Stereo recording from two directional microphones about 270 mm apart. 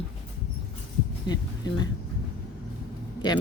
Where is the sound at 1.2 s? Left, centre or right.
Centre.